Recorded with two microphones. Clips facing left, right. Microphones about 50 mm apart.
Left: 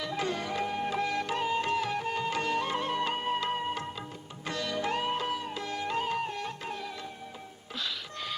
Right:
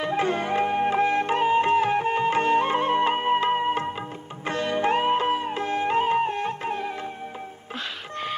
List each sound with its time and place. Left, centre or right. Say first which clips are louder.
0.0 s music: right 8 dB; right